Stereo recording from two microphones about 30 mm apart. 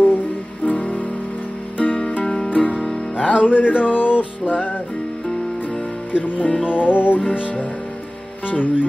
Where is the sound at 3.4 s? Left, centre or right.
Left.